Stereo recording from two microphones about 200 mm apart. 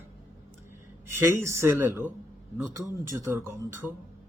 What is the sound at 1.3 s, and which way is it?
Speech, 15° right (ahead or behind).